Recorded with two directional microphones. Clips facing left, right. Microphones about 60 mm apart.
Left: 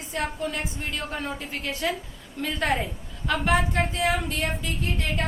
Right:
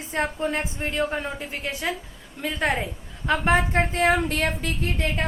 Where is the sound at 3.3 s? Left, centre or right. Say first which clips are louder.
Right 2 dB; right.